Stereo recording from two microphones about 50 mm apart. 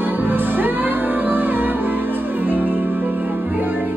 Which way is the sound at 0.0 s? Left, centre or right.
Right.